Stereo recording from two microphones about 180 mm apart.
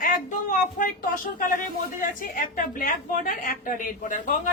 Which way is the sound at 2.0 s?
50° left (ahead or behind).